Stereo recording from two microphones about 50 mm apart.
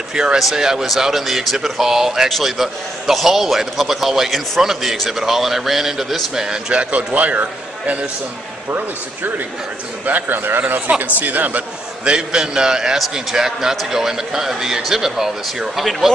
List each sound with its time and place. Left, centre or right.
0.1 s a man's voice: centre
6.4 s a man's voice: centre
10.0 s a man's voice: right
11.1 s speech: right
12.0 s a man's voice: centre